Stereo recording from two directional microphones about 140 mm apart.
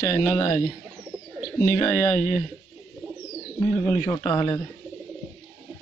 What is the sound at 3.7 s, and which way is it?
Speech, 20° left (ahead or behind).